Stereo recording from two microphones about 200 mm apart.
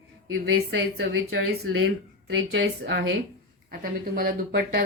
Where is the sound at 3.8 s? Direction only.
45° right (ahead or behind).